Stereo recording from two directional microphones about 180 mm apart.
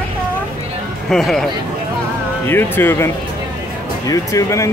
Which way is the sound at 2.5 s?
10° left (ahead or behind).